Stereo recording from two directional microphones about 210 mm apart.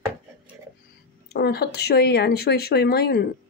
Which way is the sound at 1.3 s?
50° left (ahead or behind).